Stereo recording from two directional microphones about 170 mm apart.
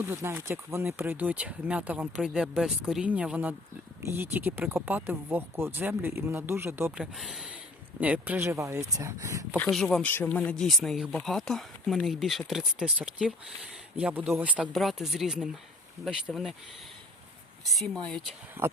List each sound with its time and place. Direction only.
0.0 s speech: 15° right (ahead or behind)
9.6 s speech: centre (ahead or behind)
17.7 s speech: centre (ahead or behind)